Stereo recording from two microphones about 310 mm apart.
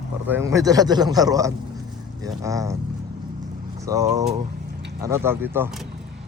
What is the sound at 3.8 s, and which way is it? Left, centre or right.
Speech, centre.